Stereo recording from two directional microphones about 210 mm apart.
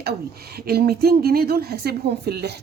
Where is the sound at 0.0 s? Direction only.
50° right (ahead or behind).